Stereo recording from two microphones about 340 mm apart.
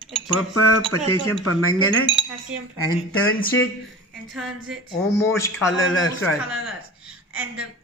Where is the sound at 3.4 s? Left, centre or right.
Left.